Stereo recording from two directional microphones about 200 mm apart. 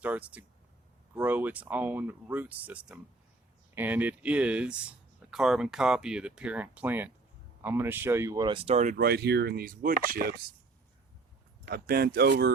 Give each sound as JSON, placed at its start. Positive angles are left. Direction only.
{"t": 0.0, "sound": "speech", "side_deg": -5}
{"t": 11.7, "sound": "speech", "side_deg": -50}